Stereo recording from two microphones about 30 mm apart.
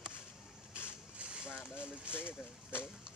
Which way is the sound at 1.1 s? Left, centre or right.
Right.